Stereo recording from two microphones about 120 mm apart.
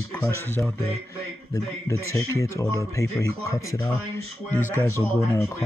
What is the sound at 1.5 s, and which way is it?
Speech, 25° left (ahead or behind).